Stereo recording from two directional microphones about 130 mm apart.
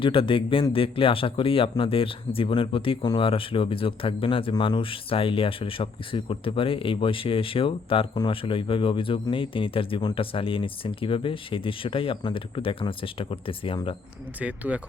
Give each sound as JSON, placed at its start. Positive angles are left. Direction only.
{"t": 0.0, "sound": "speech", "side_deg": 40}
{"t": 14.3, "sound": "speech", "side_deg": -10}